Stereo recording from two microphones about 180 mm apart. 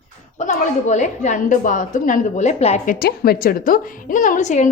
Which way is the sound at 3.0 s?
55° left (ahead or behind).